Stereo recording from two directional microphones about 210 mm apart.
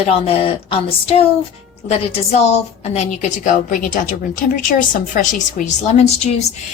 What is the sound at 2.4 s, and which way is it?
A woman's voice, 30° left (ahead or behind).